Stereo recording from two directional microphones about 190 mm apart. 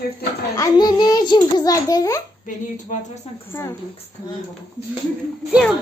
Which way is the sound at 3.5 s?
15° left (ahead or behind).